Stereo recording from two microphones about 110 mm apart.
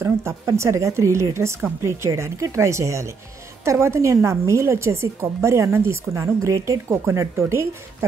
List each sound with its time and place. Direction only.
0.0 s a woman's voice: 25° right (ahead or behind)